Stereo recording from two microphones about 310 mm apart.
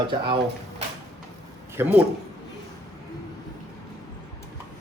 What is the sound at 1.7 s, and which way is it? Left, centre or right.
Speech, centre.